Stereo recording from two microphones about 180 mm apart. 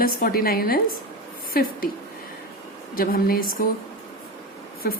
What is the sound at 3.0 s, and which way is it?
Speech, 55° left (ahead or behind).